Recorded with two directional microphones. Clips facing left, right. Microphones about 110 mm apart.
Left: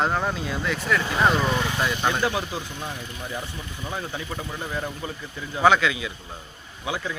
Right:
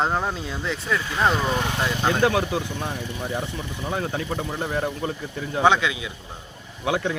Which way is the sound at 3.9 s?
45° right (ahead or behind).